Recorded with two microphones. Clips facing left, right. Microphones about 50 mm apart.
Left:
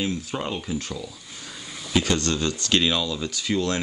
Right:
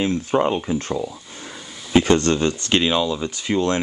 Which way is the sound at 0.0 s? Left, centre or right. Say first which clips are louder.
Right 9 dB; right.